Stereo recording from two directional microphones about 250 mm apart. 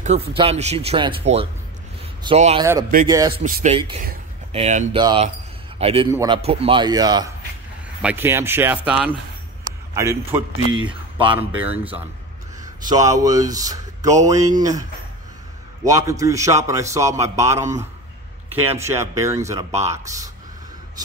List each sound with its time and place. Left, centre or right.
0.0 s a man's voice: right
3.4 s a man's voice: right
11.3 s a man's voice: centre